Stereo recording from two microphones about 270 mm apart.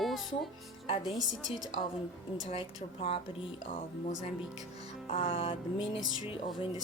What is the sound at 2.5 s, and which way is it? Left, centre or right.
Music, left.